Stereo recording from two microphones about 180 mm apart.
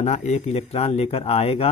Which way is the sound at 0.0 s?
40° left (ahead or behind).